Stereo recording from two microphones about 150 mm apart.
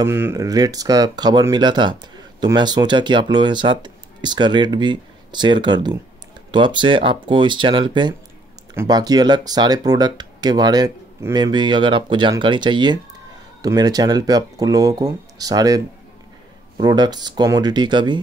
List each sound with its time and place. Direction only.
0.0 s speech: 15° right (ahead or behind)